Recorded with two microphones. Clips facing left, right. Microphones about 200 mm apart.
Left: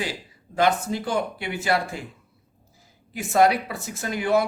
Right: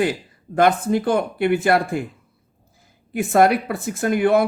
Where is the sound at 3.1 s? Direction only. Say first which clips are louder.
Right 3 dB; 55° right (ahead or behind).